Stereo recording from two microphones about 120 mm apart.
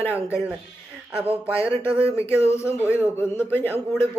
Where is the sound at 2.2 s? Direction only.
20° left (ahead or behind).